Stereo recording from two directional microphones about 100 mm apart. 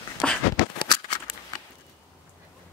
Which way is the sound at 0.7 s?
50° left (ahead or behind).